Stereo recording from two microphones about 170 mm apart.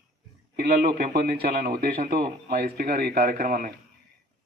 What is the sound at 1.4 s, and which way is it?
A man's voice, 60° right (ahead or behind).